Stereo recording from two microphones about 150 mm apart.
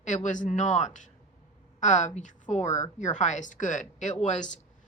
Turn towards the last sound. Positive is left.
turn(degrees=55)  # may be behind; listen again after turning